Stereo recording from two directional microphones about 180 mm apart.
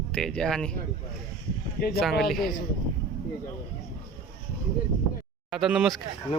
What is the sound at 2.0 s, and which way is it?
Speech, centre (ahead or behind).